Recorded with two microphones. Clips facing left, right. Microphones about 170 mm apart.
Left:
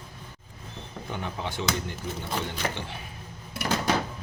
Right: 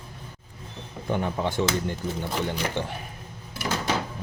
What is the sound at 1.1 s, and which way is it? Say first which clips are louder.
Speech: right 8 dB; 50° right (ahead or behind).